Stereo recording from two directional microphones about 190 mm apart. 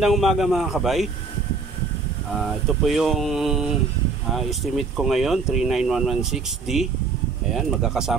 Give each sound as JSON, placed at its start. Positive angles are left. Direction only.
{"t": 0.0, "sound": "speech", "side_deg": 0}
{"t": 2.8, "sound": "speech", "side_deg": 0}